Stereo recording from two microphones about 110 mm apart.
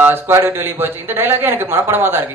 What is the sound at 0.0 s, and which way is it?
Speech, 20° right (ahead or behind).